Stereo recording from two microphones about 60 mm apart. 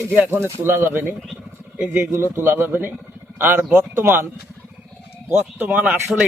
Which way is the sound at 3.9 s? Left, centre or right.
Right.